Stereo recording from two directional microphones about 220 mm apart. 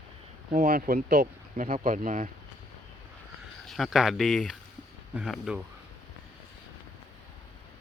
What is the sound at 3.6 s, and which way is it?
A man's voice, centre (ahead or behind).